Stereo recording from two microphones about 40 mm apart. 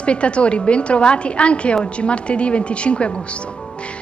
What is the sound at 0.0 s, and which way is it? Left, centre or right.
A woman's voice, left.